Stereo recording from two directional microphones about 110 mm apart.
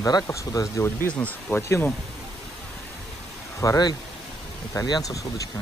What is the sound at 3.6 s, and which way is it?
Speech, 35° left (ahead or behind).